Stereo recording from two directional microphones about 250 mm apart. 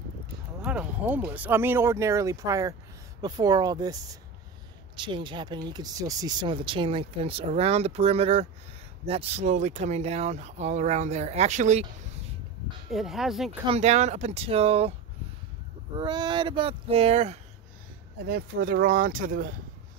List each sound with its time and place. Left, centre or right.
0.6 s speech: centre; by 11.9 s right
12.9 s speech: centre
13.5 s speech: right
16.0 s speech: centre
18.2 s speech: right